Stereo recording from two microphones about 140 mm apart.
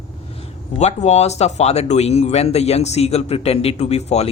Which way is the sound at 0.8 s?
50° left (ahead or behind).